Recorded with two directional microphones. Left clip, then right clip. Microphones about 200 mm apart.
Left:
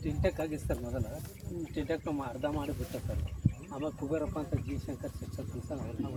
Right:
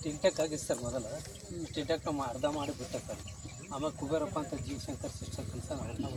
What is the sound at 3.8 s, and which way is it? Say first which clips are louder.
Speech: right 1 dB; 15° left (ahead or behind).